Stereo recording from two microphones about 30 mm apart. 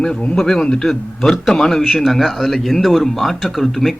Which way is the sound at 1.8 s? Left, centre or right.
Centre.